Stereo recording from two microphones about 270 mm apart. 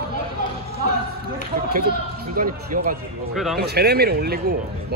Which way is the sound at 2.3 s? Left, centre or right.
Right.